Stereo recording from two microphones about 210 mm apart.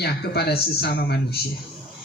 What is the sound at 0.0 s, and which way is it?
Speech, 50° left (ahead or behind).